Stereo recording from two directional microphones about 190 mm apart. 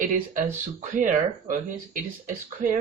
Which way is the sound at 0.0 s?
40° right (ahead or behind).